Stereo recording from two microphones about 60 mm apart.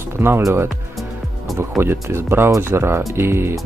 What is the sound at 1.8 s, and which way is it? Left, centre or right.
Speech, right.